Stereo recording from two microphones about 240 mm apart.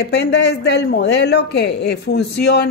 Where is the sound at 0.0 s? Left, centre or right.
Left.